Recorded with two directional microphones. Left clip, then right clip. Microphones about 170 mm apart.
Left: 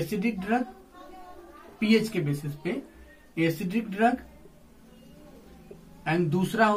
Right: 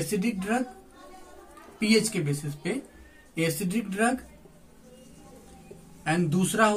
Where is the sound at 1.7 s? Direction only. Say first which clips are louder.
Right 1 dB; 30° right (ahead or behind).